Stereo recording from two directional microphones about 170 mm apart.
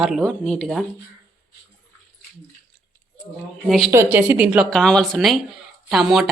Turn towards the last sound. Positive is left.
turn(degrees=0)  # may be behind; listen again after turning